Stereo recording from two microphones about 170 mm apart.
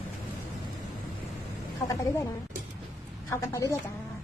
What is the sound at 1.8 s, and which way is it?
Speech, 20° left (ahead or behind).